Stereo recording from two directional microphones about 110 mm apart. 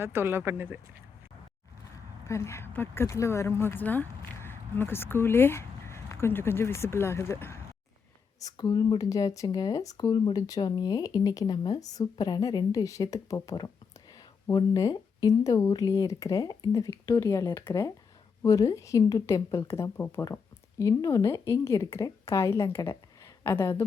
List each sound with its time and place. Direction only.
0.0 s speech: 20° right (ahead or behind)
2.2 s speech: 25° left (ahead or behind)
8.4 s a woman's voice: 35° left (ahead or behind)